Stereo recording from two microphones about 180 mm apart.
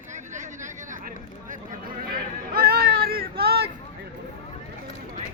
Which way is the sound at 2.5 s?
60° right (ahead or behind).